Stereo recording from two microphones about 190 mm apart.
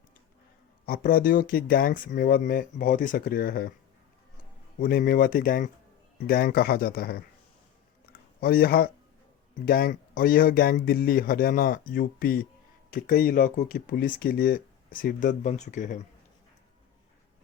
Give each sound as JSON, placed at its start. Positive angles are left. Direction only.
{"t": 0.9, "sound": "speech", "side_deg": 50}
{"t": 4.8, "sound": "speech", "side_deg": 50}
{"t": 8.4, "sound": "speech", "side_deg": 50}